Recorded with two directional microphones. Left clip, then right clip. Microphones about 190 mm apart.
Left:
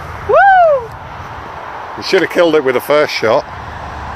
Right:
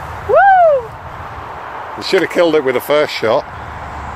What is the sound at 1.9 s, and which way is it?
Speech, centre (ahead or behind).